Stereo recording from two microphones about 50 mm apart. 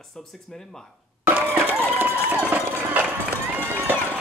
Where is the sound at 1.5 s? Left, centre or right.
Right.